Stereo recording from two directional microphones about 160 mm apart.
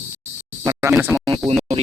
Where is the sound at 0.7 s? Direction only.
20° right (ahead or behind).